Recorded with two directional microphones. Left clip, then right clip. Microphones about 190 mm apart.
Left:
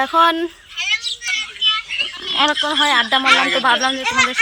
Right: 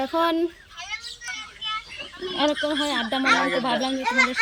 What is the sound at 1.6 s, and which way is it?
Children playing, 45° right (ahead or behind).